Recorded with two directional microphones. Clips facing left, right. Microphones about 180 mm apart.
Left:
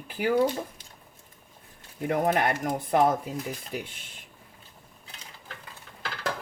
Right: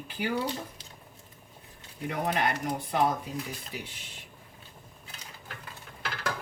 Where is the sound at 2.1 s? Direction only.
50° left (ahead or behind).